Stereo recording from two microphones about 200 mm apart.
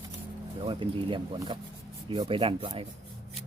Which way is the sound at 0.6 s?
25° right (ahead or behind).